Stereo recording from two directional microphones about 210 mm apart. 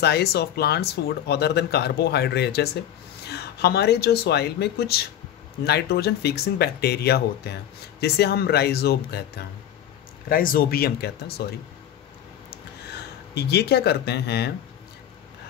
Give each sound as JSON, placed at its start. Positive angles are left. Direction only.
{"t": 0.0, "sound": "speech", "side_deg": 50}
{"t": 13.3, "sound": "speech", "side_deg": 50}